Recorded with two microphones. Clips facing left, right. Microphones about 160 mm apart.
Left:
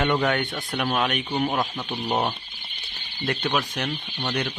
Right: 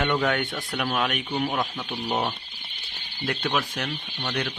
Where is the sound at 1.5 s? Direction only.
5° left (ahead or behind).